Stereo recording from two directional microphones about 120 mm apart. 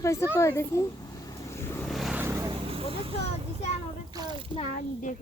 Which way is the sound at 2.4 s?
50° right (ahead or behind).